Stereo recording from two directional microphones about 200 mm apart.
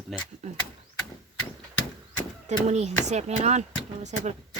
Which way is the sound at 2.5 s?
35° right (ahead or behind).